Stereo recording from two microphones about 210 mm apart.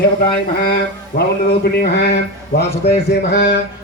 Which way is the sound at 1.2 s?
50° left (ahead or behind).